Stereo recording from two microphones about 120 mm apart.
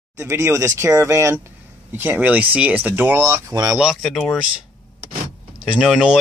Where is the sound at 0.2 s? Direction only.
20° right (ahead or behind).